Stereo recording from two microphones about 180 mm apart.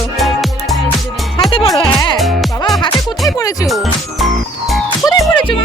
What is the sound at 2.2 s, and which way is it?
Music, centre (ahead or behind).